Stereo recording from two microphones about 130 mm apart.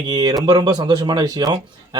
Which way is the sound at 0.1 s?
35° right (ahead or behind).